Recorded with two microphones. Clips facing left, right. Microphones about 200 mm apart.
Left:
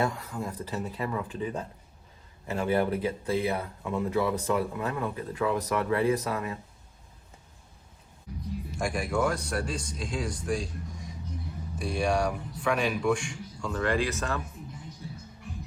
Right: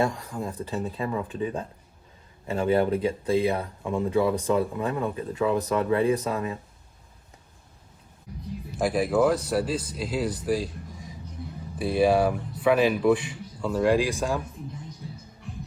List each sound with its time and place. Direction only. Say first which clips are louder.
0.0 s speech: right 3 dB; 25° right (ahead or behind)
8.8 s speech: right 6 dB; 5° right (ahead or behind)